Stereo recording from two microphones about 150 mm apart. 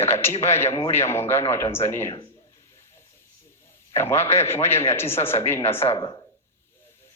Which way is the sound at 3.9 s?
15° left (ahead or behind).